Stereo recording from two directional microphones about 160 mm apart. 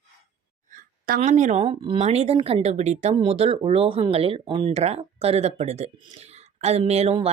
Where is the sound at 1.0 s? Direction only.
55° right (ahead or behind).